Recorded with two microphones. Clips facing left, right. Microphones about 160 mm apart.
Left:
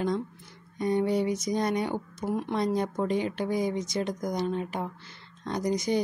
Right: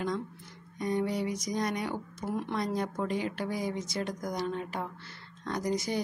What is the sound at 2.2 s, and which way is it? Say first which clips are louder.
Speech: left 4 dB; 25° left (ahead or behind).